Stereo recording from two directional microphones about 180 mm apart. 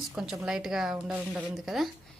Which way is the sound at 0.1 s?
5° right (ahead or behind).